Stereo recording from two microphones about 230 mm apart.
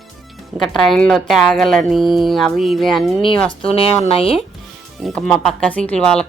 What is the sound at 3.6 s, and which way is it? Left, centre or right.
Speech, left.